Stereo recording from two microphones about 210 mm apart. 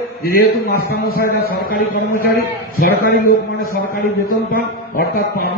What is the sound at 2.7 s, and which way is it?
A man's voice, 45° left (ahead or behind).